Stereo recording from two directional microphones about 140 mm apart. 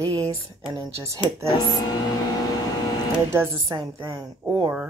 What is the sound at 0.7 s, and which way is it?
Speech, 25° right (ahead or behind).